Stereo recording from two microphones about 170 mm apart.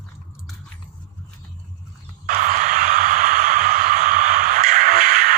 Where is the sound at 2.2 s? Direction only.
50° right (ahead or behind).